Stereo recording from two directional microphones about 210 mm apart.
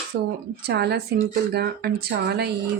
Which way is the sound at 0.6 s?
50° right (ahead or behind).